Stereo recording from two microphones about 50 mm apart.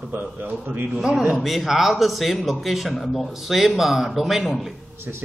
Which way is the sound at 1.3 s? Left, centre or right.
Centre.